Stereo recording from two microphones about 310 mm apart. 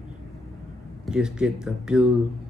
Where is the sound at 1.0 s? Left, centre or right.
Centre.